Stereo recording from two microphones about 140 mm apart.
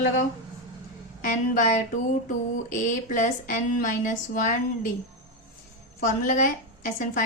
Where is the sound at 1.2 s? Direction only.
65° left (ahead or behind).